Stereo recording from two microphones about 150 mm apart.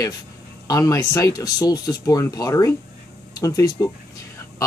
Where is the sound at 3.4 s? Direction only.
20° left (ahead or behind).